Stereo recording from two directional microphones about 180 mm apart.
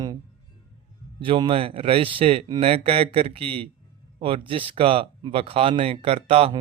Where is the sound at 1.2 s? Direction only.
30° right (ahead or behind).